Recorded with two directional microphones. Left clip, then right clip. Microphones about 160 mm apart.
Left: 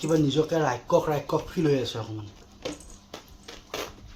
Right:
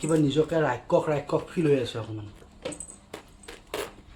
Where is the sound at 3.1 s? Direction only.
35° right (ahead or behind).